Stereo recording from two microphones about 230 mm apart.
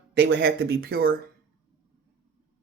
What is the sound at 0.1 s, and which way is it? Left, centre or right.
Speech, right.